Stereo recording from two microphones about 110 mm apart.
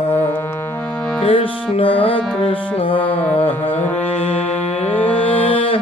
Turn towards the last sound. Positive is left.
turn(degrees=55)  # may be behind; listen again after turning